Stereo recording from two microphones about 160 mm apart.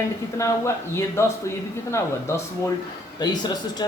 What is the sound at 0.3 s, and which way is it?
A man's voice, 20° left (ahead or behind).